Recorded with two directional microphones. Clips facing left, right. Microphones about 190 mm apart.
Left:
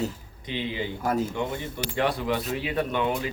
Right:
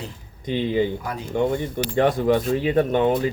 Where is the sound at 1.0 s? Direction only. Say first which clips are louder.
Left 6 dB; 45° left (ahead or behind).